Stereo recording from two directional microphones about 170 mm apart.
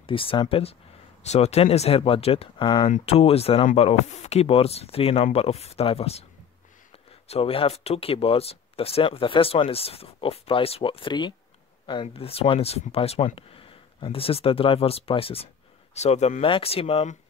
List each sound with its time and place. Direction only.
0.0 s speech: 30° left (ahead or behind)
7.2 s speech: 35° left (ahead or behind)